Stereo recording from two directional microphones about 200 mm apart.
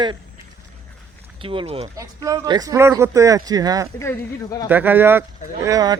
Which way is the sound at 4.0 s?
15° left (ahead or behind).